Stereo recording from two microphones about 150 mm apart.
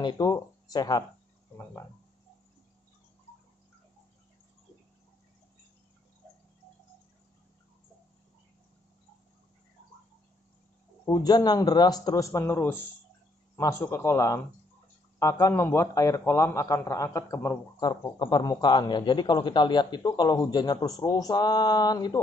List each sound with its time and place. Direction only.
0.0 s speech: 25° left (ahead or behind)
11.1 s a man's voice: 25° left (ahead or behind)